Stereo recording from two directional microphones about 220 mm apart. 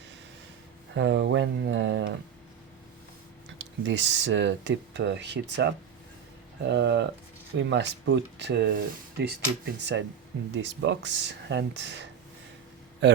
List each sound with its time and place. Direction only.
0.9 s speech: 55° right (ahead or behind)
3.6 s speech: 55° right (ahead or behind)